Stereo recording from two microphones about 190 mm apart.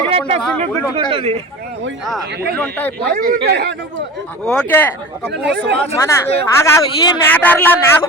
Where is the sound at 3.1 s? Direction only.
55° right (ahead or behind).